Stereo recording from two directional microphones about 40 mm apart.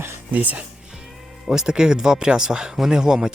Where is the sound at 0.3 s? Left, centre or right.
Right.